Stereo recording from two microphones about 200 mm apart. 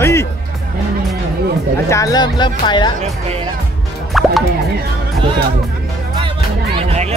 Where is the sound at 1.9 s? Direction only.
15° left (ahead or behind).